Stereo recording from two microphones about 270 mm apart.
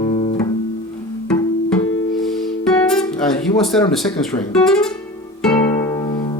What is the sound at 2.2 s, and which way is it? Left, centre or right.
Music, centre.